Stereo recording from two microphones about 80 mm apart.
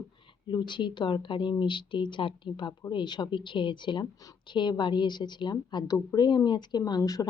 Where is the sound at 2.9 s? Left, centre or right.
Left.